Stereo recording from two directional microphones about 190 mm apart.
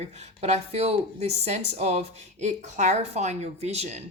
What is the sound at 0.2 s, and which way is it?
Speech, 35° right (ahead or behind).